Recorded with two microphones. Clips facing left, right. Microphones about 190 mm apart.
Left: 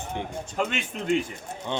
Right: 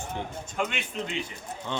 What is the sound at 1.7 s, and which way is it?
Speech, 20° left (ahead or behind).